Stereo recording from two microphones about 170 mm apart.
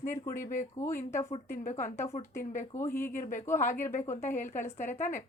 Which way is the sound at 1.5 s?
50° left (ahead or behind).